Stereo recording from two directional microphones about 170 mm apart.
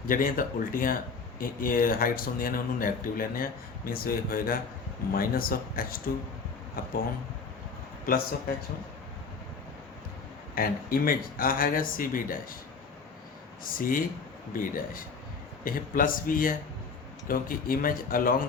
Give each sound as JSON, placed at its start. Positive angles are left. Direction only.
{"t": 0.1, "sound": "speech", "side_deg": 55}
{"t": 10.5, "sound": "speech", "side_deg": 60}
{"t": 13.7, "sound": "speech", "side_deg": 55}